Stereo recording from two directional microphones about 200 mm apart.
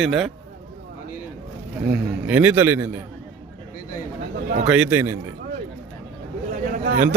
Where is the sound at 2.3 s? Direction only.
5° right (ahead or behind).